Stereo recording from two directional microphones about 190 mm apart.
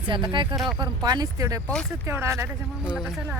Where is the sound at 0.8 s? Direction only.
20° right (ahead or behind).